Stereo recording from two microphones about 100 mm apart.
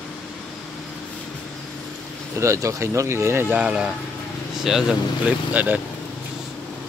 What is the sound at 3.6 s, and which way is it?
Speech, 10° right (ahead or behind).